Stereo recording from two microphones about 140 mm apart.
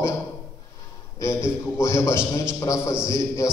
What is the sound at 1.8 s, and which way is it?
A man's voice, 20° left (ahead or behind).